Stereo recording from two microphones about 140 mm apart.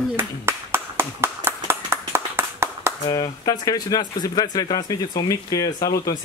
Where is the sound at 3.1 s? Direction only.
30° left (ahead or behind).